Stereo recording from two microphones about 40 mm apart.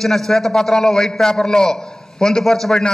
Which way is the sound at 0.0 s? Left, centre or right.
Centre.